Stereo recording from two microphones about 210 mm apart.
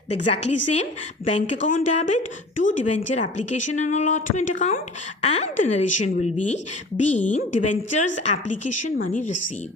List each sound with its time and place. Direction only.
0.2 s a woman's voice: 30° left (ahead or behind)